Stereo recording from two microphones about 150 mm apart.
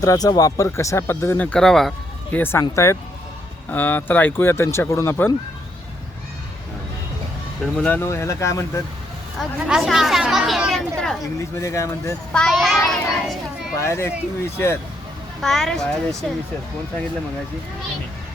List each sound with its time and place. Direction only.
0.0 s speech: 25° left (ahead or behind); by 1.9 s centre (ahead or behind)
2.3 s speech: 15° left (ahead or behind)
7.6 s speech: 10° left (ahead or behind)
9.4 s speech: 5° right (ahead or behind)
11.3 s speech: 20° left (ahead or behind)
12.3 s a child's voice: 5° left (ahead or behind)
13.7 s speech: 15° left (ahead or behind)
15.4 s speech: centre (ahead or behind)